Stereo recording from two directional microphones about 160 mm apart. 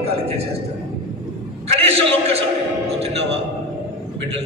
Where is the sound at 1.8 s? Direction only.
40° right (ahead or behind).